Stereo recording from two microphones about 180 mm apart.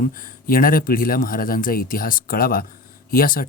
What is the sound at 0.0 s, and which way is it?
Speech, 50° left (ahead or behind).